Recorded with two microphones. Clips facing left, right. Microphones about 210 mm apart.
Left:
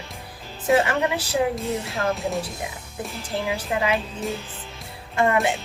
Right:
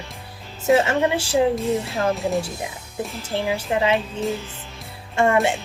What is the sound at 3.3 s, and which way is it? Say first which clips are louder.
Speech: right 3 dB; 25° right (ahead or behind).